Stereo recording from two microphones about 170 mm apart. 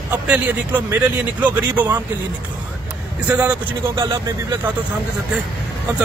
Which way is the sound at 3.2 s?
10° right (ahead or behind).